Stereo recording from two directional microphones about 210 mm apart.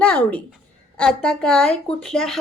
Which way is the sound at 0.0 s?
5° left (ahead or behind).